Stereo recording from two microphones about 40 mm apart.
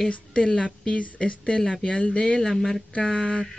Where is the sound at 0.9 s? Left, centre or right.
Left.